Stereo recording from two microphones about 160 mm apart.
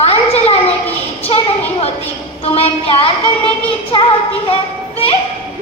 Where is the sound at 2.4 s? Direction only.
40° left (ahead or behind).